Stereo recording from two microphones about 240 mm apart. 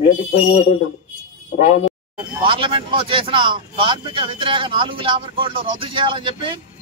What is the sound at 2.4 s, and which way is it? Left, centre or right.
A man's voice, right.